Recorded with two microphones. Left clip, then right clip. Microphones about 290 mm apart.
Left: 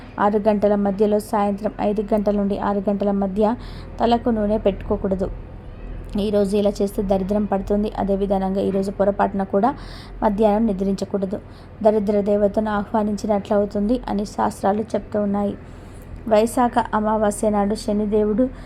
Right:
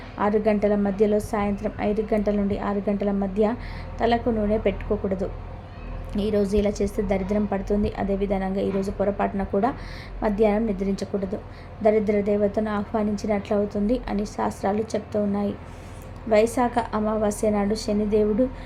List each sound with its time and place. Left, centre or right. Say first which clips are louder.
0.2 s a woman's voice: left 4 dB; centre